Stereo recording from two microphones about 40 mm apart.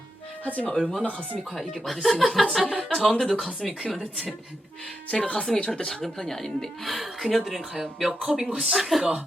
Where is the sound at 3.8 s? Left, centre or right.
Centre.